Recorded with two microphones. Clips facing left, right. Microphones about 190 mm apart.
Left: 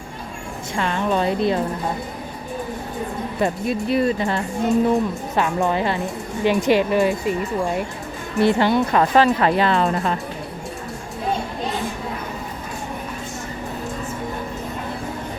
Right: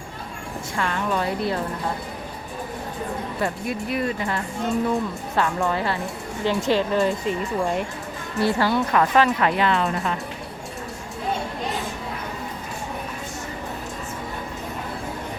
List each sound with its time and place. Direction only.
0.8 s speech: 25° left (ahead or behind)
3.4 s speech: 30° left (ahead or behind); by 7.8 s 10° left (ahead or behind)
8.4 s speech: 20° left (ahead or behind)